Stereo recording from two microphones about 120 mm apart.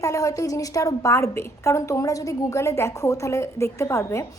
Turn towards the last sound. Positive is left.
turn(degrees=25)  # may be behind; listen again after turning